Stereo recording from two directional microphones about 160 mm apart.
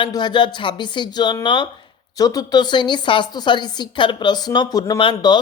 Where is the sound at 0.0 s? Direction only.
30° left (ahead or behind).